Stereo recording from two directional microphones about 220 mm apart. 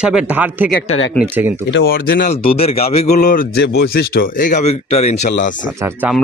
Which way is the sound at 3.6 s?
50° left (ahead or behind).